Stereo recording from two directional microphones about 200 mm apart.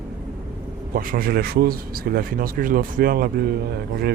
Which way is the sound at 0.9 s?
45° right (ahead or behind).